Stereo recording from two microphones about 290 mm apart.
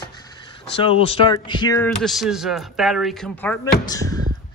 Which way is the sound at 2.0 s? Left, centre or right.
Centre.